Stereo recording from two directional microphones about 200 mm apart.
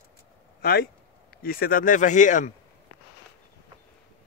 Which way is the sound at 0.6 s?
50° left (ahead or behind).